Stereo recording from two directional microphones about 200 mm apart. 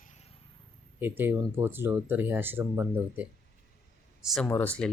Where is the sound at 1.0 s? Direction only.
10° right (ahead or behind).